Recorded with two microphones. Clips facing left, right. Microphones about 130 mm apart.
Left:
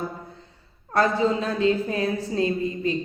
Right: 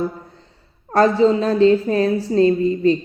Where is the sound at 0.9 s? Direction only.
35° right (ahead or behind).